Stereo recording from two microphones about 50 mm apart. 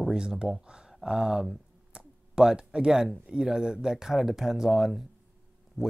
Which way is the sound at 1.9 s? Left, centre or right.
Centre.